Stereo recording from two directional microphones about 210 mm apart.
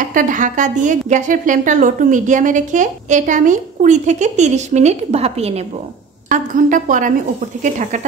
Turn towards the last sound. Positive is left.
turn(degrees=-35)  # may be behind; listen again after turning